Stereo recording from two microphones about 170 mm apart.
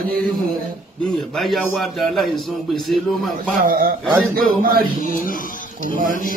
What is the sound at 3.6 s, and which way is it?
A man's voice, 55° right (ahead or behind).